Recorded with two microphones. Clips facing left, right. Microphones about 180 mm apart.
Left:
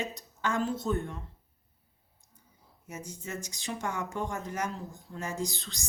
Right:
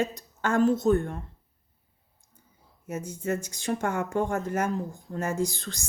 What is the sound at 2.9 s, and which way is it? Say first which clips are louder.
Speech: right 10 dB; 55° right (ahead or behind).